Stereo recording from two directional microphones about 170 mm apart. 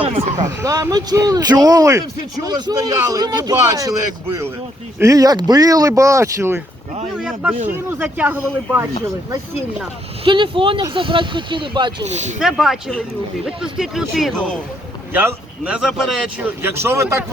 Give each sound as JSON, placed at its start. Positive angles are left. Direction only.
{"t": 0.0, "sound": "a sound", "side_deg": -35}
{"t": 0.4, "sound": "speech", "side_deg": -20}
{"t": 7.2, "sound": "a man's voice", "side_deg": -5}
{"t": 10.2, "sound": "speech", "side_deg": -30}
{"t": 12.4, "sound": "a man's voice", "side_deg": 0}
{"t": 15.1, "sound": "a man's voice", "side_deg": -10}
{"t": 16.6, "sound": "speech", "side_deg": -15}